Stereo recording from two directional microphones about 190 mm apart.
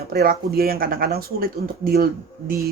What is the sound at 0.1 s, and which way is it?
Speech, 55° right (ahead or behind).